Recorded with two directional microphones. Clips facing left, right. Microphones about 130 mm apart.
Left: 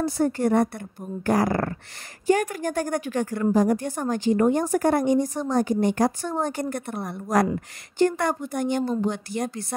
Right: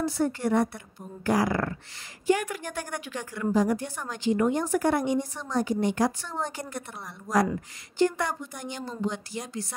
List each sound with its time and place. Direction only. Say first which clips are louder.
0.0 s a woman's voice: left 4 dB; 45° left (ahead or behind)